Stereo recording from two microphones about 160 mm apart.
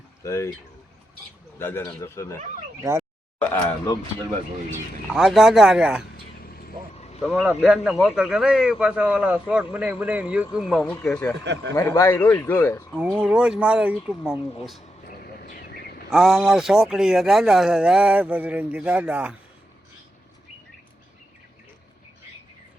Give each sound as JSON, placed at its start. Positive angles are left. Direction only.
{"t": 0.3, "sound": "speech", "side_deg": 20}
{"t": 1.5, "sound": "speech", "side_deg": 15}
{"t": 3.0, "sound": "a sound", "side_deg": 10}
{"t": 5.1, "sound": "speech", "side_deg": 0}
{"t": 6.9, "sound": "vehicle", "side_deg": 40}
{"t": 7.6, "sound": "speech", "side_deg": -5}
{"t": 11.7, "sound": "speech", "side_deg": 20}
{"t": 12.9, "sound": "speech", "side_deg": -5}
{"t": 15.0, "sound": "a sound", "side_deg": 65}
{"t": 16.0, "sound": "speech", "side_deg": 0}